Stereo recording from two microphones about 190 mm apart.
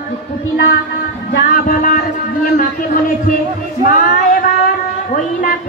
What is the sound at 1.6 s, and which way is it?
Speech, 45° left (ahead or behind).